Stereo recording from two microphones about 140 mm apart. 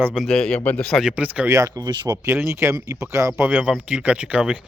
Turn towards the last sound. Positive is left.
turn(degrees=-10)  # may be behind; listen again after turning